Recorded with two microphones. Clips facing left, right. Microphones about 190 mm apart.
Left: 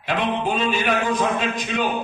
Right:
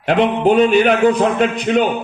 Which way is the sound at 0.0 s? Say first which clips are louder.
Right 9 dB; 65° right (ahead or behind).